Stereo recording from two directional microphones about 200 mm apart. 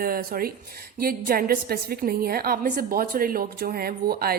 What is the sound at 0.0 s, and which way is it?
A woman's voice, 45° right (ahead or behind).